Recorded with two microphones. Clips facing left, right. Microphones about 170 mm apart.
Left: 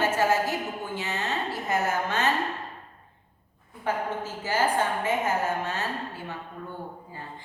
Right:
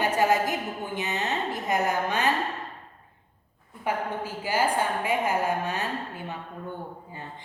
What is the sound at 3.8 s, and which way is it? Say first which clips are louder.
Speech: even; 15° right (ahead or behind).